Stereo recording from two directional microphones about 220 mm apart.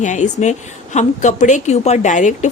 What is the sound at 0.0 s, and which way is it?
A woman's voice, 35° left (ahead or behind).